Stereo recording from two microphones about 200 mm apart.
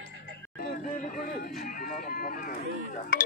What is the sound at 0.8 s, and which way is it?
Speech, 40° left (ahead or behind).